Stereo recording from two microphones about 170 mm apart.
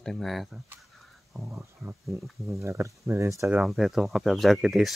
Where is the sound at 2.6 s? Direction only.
15° right (ahead or behind).